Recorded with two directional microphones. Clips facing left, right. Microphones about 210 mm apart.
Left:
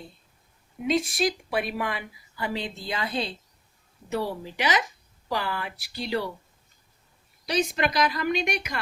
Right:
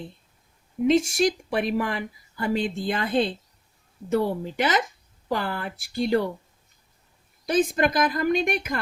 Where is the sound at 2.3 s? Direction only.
50° right (ahead or behind).